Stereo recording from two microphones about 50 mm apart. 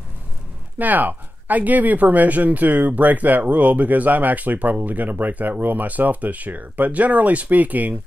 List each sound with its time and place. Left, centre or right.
0.7 s speech: right